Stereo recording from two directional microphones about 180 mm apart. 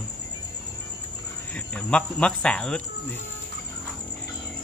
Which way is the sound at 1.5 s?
5° left (ahead or behind).